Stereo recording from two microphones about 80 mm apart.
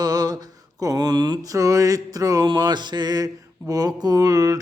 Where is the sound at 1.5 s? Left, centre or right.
Right.